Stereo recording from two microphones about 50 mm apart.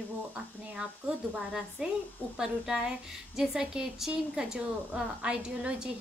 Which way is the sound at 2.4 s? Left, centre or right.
Centre.